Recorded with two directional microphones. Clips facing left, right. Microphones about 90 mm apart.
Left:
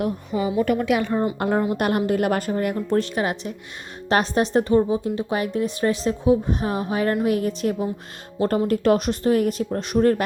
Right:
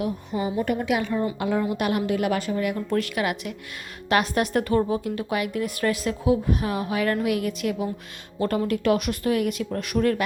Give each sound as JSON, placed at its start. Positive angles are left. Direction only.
{"t": 0.3, "sound": "a woman's voice", "side_deg": 90}
{"t": 0.9, "sound": "a woman's voice", "side_deg": 55}
{"t": 2.7, "sound": "speech", "side_deg": 30}